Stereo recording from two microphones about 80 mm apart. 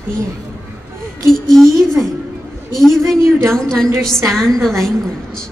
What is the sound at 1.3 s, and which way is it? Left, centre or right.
A woman's voice, centre.